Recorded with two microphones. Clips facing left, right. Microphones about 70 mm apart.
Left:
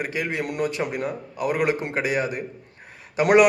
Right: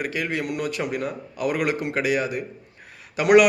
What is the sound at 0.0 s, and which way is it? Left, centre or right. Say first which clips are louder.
A man's voice: even; left.